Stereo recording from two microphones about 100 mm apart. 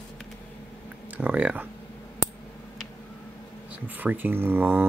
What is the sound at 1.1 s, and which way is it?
Speech, 15° right (ahead or behind).